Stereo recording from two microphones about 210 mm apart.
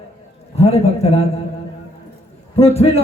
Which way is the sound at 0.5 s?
30° left (ahead or behind).